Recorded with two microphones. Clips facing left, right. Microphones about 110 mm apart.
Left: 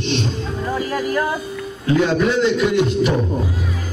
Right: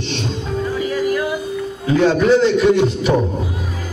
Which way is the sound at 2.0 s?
Centre (ahead or behind).